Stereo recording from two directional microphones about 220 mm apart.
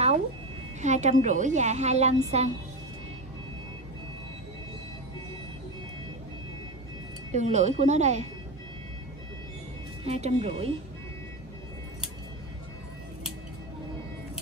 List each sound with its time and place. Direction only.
0.7 s a woman's voice: 30° right (ahead or behind)
7.3 s a woman's voice: 30° right (ahead or behind)
10.0 s speech: 30° right (ahead or behind)